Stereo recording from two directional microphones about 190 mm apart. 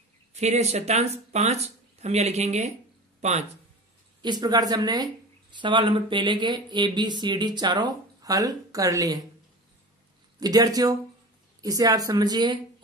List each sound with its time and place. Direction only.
0.3 s speech: 35° right (ahead or behind)
4.2 s speech: 20° right (ahead or behind)
10.4 s speech: 20° right (ahead or behind)